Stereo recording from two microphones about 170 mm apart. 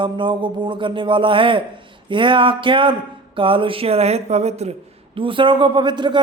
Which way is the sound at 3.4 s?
30° right (ahead or behind).